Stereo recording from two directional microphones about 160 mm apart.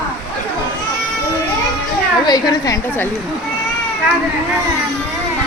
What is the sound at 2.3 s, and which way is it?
Speech, 25° left (ahead or behind).